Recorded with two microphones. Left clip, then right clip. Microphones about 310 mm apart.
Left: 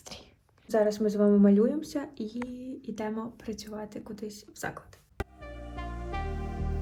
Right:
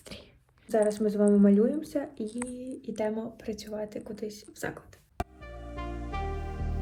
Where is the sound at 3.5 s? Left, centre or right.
Centre.